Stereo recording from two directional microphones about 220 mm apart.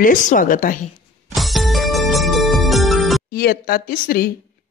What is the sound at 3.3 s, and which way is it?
Speech, 45° left (ahead or behind).